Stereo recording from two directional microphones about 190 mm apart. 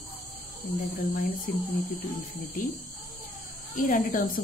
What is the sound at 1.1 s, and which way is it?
Speech, 50° left (ahead or behind).